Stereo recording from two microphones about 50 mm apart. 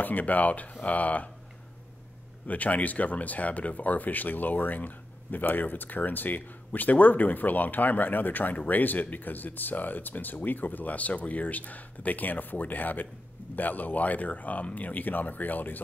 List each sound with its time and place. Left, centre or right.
0.0 s speech: left
2.4 s speech: left